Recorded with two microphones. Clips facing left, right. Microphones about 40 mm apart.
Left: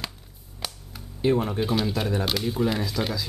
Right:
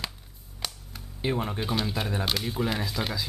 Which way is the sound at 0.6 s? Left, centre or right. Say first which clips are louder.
Left 1 dB; centre.